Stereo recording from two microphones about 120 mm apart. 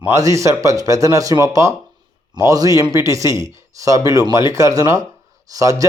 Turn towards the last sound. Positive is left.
turn(degrees=-30)  # may be behind; listen again after turning